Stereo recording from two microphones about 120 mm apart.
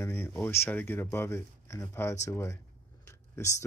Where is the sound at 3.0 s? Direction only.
25° left (ahead or behind).